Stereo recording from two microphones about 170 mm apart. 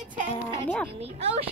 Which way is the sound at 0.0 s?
50° right (ahead or behind).